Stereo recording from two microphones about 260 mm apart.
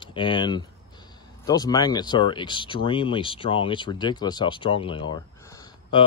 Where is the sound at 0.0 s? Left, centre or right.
Centre.